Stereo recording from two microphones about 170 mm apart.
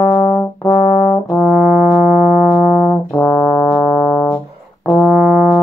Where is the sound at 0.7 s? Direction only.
50° left (ahead or behind).